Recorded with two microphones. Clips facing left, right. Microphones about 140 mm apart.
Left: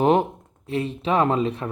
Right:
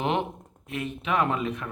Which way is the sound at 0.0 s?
40° left (ahead or behind).